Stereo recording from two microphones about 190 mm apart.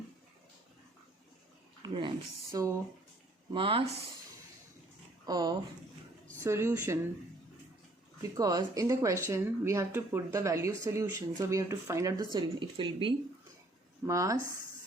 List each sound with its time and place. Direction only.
1.8 s a sound: 25° right (ahead or behind)
3.5 s speech: 25° right (ahead or behind)
5.2 s speech: 20° right (ahead or behind)
8.2 s speech: 20° right (ahead or behind)
14.1 s speech: 15° right (ahead or behind)